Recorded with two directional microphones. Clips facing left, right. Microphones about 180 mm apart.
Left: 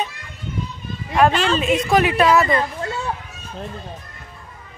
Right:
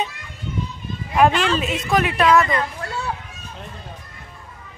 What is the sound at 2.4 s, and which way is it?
Speech, 30° left (ahead or behind).